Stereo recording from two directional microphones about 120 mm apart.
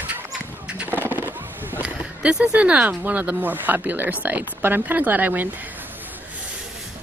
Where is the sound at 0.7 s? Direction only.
10° right (ahead or behind).